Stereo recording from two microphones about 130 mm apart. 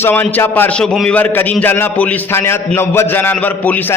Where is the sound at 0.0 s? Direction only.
15° left (ahead or behind).